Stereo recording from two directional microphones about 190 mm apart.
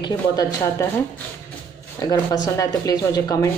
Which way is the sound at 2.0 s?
20° left (ahead or behind).